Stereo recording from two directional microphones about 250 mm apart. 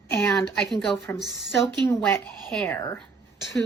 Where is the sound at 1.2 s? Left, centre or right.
Centre.